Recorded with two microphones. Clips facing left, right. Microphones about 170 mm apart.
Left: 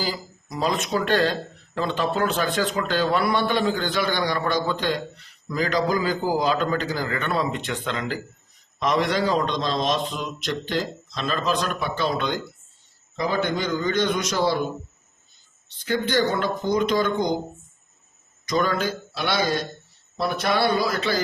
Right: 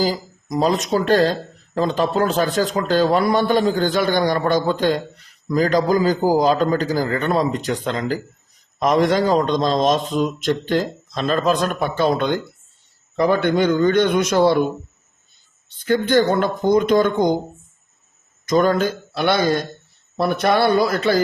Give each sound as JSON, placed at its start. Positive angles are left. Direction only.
{"t": 0.0, "sound": "a man's voice", "side_deg": -40}
{"t": 13.1, "sound": "a man's voice", "side_deg": -60}
{"t": 15.8, "sound": "a man's voice", "side_deg": -50}
{"t": 18.4, "sound": "a man's voice", "side_deg": -45}